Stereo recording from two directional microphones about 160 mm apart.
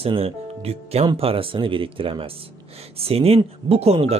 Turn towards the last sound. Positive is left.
turn(degrees=-40)  # may be behind; listen again after turning